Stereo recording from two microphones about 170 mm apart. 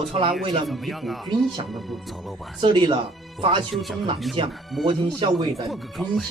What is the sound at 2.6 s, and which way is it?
Speech, 30° right (ahead or behind).